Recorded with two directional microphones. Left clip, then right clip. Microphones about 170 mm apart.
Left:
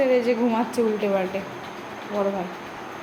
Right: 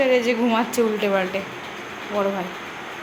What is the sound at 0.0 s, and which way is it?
A woman's voice, centre (ahead or behind).